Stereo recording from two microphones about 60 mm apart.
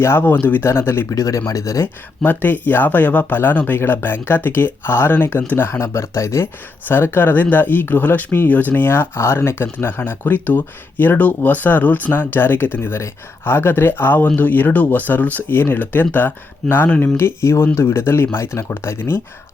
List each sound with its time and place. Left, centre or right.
0.0 s speech: left
0.6 s speech: left
1.1 s speech: left
2.2 s speech: left
5.8 s speech: left
6.8 s speech: left
17.0 s speech: left